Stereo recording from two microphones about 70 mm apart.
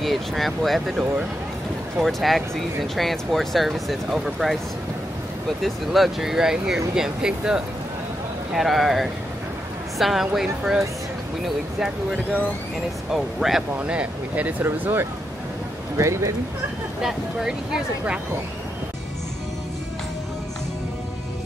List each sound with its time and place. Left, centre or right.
0.0 s speech: centre
2.0 s speech: centre
5.6 s speech: centre
13.1 s speech: centre
13.7 s speech: centre
14.6 s speech: right
16.0 s speech: right
17.0 s speech: centre